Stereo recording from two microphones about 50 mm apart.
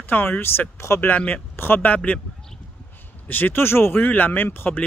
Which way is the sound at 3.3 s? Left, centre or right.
Left.